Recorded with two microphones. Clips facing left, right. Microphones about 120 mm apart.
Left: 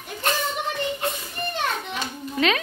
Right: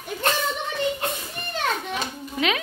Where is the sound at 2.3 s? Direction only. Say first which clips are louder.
Left 3 dB; 10° right (ahead or behind).